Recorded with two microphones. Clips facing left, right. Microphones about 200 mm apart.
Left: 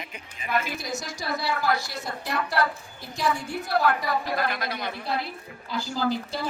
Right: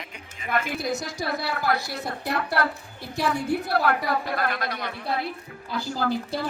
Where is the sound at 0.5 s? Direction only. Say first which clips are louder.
Right 2 dB; 60° right (ahead or behind).